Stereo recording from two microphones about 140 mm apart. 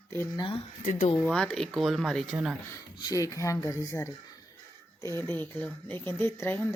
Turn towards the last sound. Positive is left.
turn(degrees=15)  # may be behind; listen again after turning